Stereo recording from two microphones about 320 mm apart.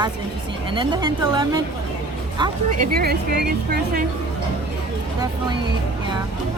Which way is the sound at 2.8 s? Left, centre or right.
Right.